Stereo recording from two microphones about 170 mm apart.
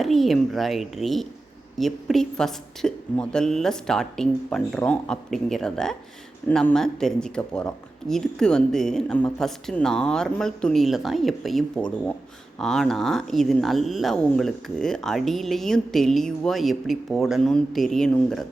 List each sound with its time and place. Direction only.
0.0 s speech: centre (ahead or behind)